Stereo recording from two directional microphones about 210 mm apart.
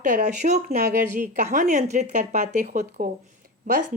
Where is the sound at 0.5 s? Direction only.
50° right (ahead or behind).